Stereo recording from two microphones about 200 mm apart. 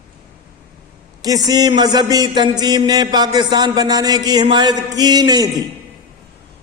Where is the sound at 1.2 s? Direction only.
20° right (ahead or behind).